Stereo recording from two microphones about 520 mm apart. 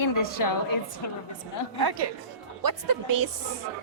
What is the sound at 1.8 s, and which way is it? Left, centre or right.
Speech, right.